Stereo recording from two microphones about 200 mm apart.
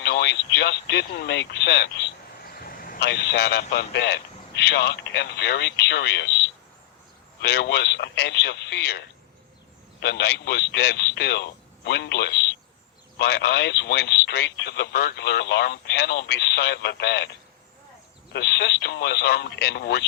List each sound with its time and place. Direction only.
0.0 s radio: 60° left (ahead or behind)
3.0 s speech: 60° left (ahead or behind)
18.3 s speech: 60° left (ahead or behind)